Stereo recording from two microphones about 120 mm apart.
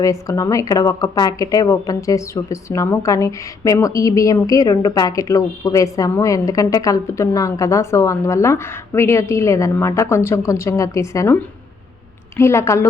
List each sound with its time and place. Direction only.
0.0 s speech: 25° left (ahead or behind)
12.4 s speech: 20° left (ahead or behind)